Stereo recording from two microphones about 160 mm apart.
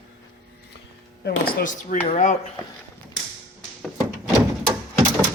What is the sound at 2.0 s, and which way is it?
Speech, 50° left (ahead or behind).